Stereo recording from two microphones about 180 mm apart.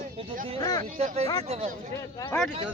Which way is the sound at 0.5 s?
20° left (ahead or behind).